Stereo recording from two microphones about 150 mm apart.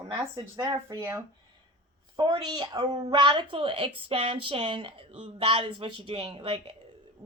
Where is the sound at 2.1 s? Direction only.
30° right (ahead or behind).